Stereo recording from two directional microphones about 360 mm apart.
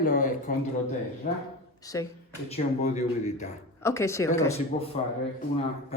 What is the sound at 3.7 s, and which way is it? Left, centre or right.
Speech, centre.